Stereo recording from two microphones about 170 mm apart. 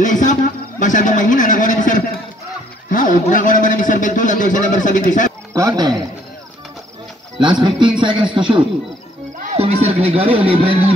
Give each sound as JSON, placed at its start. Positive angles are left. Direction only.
{"t": 0.0, "sound": "speech", "side_deg": 50}
{"t": 5.5, "sound": "speech", "side_deg": -20}
{"t": 7.3, "sound": "speech", "side_deg": -30}